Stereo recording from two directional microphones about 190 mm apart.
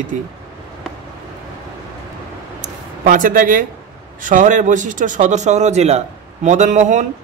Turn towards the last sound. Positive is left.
turn(degrees=-40)  # may be behind; listen again after turning